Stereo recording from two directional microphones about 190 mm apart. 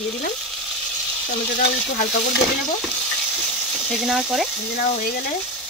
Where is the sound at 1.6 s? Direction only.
50° left (ahead or behind).